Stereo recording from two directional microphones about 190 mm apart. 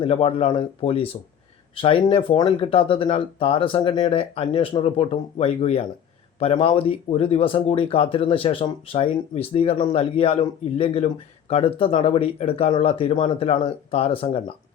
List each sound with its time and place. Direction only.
0.0 s speech: 30° left (ahead or behind)